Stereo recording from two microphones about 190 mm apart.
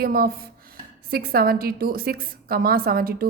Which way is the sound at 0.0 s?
50° right (ahead or behind).